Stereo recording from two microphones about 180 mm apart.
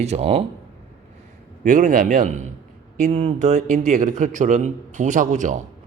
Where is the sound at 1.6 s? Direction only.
50° right (ahead or behind).